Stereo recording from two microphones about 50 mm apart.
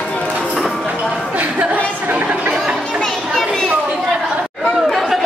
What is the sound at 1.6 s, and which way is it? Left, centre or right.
Chatter, right.